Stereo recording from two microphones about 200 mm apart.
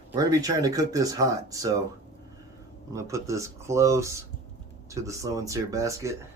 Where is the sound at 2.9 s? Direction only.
15° right (ahead or behind).